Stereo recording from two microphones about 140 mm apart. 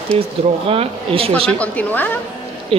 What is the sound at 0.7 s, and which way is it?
Speech, 45° right (ahead or behind).